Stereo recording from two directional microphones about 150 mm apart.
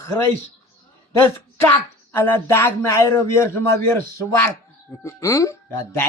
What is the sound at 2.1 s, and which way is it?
A man's voice, 15° left (ahead or behind).